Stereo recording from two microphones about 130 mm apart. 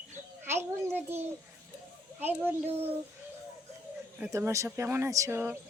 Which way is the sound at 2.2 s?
15° right (ahead or behind).